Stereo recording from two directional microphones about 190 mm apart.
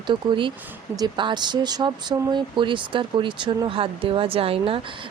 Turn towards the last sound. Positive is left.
turn(degrees=-30)  # may be behind; listen again after turning